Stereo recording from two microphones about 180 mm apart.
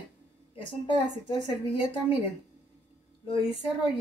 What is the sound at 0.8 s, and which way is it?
A woman's voice, 30° left (ahead or behind).